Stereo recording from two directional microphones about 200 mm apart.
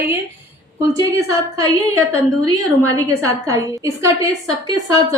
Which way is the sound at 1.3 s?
20° right (ahead or behind).